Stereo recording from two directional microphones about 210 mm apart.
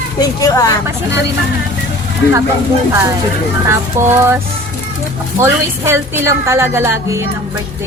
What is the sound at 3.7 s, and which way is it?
Speech, 10° right (ahead or behind).